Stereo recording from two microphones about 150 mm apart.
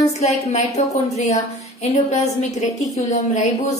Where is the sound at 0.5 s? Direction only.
50° left (ahead or behind).